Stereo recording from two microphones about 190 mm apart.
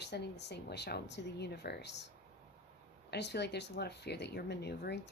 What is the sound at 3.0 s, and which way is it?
Speech, 65° left (ahead or behind).